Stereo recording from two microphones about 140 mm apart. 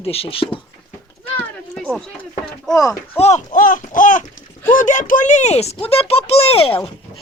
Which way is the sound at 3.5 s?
75° left (ahead or behind).